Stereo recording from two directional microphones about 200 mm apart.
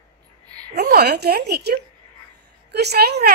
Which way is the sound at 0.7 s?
55° right (ahead or behind).